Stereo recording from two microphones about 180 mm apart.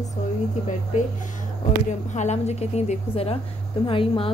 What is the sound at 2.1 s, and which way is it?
Speech, 40° left (ahead or behind).